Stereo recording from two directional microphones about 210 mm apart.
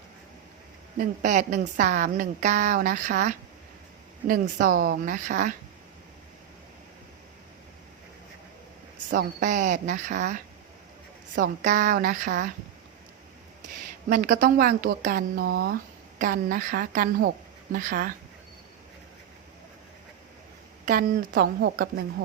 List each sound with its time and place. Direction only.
0.9 s a woman's voice: 35° right (ahead or behind)
9.0 s a woman's voice: 40° right (ahead or behind)
11.6 s a woman's voice: 35° right (ahead or behind)
14.1 s a woman's voice: 40° right (ahead or behind)
20.8 s a woman's voice: 45° right (ahead or behind)